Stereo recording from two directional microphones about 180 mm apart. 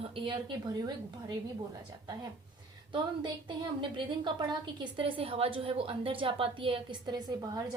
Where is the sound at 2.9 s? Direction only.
25° right (ahead or behind).